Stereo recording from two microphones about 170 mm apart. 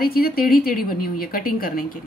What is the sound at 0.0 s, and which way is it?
A woman's voice, 60° left (ahead or behind).